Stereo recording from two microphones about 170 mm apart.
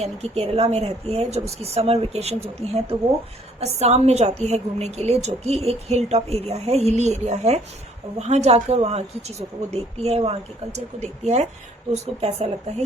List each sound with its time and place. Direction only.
0.0 s a woman's voice: 40° right (ahead or behind)